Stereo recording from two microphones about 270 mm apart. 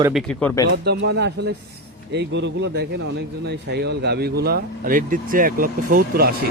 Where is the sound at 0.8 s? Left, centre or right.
Right.